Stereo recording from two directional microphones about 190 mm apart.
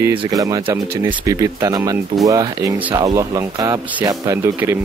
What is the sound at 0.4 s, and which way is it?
Speech, 15° right (ahead or behind).